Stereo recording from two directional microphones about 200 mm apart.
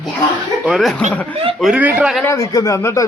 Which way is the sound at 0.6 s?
Centre (ahead or behind).